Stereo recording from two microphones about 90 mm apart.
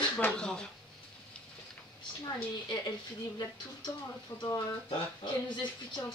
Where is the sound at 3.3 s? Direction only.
55° left (ahead or behind).